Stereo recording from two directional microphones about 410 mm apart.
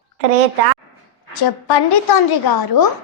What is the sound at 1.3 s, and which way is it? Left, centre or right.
A woman's voice, left.